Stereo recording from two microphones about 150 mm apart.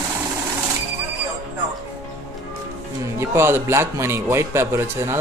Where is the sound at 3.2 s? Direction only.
15° right (ahead or behind).